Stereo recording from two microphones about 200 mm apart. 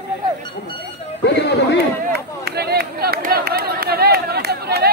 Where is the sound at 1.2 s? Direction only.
60° left (ahead or behind).